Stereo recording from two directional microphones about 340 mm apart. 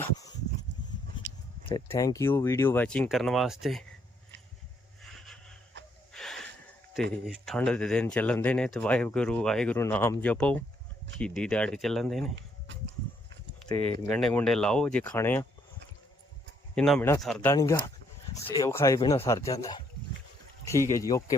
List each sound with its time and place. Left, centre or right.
1.6 s speech: centre
5.2 s wheeze: centre
6.1 s a sound: centre
7.3 s speech: centre
12.4 s a sound: right
13.7 s speech: centre
16.7 s speech: centre